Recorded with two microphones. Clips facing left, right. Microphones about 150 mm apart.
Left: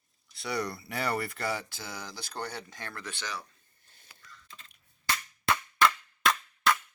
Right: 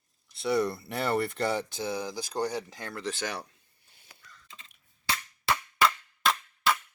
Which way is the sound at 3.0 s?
35° right (ahead or behind).